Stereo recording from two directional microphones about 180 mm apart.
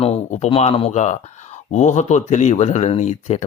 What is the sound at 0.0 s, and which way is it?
Speech, 35° left (ahead or behind).